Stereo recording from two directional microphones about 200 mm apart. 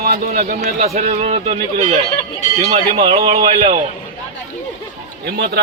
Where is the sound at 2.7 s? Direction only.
30° right (ahead or behind).